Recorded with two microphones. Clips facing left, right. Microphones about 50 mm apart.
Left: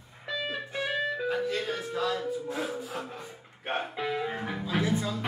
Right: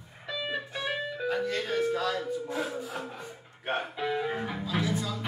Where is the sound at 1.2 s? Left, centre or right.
Centre.